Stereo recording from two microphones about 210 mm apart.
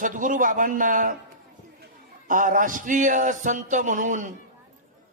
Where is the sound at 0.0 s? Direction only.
40° right (ahead or behind).